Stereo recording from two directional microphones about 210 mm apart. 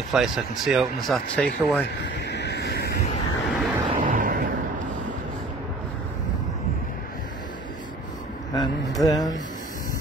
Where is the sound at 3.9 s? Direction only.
40° right (ahead or behind).